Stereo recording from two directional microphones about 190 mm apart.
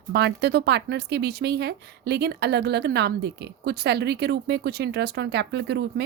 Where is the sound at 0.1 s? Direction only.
60° right (ahead or behind).